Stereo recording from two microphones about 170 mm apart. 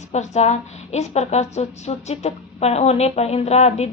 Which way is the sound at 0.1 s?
40° left (ahead or behind).